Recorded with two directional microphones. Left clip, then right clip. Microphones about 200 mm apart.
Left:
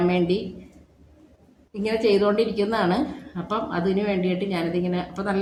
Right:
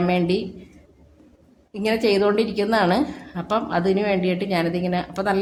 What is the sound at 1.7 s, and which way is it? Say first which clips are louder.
A woman's voice: right 1 dB; 45° right (ahead or behind).